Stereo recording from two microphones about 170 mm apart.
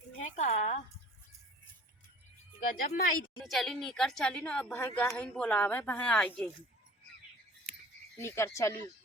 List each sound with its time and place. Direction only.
0.2 s a sound: 45° left (ahead or behind)
2.6 s speech: 55° left (ahead or behind)
3.4 s a woman's voice: centre (ahead or behind)
8.2 s speech: 15° left (ahead or behind)